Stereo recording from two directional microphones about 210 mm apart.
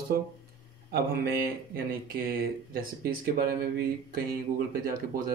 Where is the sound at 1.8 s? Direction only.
45° right (ahead or behind).